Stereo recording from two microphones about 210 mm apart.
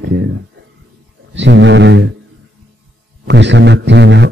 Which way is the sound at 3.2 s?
55° right (ahead or behind).